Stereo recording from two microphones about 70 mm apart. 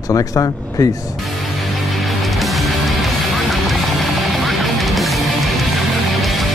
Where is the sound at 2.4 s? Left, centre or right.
Centre.